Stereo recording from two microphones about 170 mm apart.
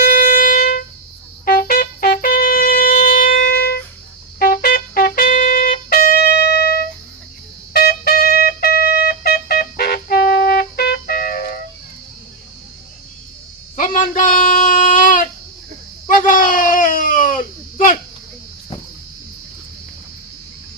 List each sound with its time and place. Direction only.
0.0 s music: 55° left (ahead or behind)
1.5 s wind instrument: 60° left (ahead or behind)
4.4 s trumpet: 55° left (ahead or behind)
7.7 s music: 65° left (ahead or behind)
13.7 s a sound: 50° left (ahead or behind)